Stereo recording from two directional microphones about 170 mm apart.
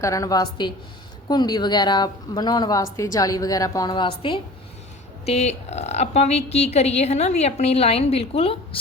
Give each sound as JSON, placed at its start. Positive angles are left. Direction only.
{"t": 0.0, "sound": "a woman's voice", "side_deg": 20}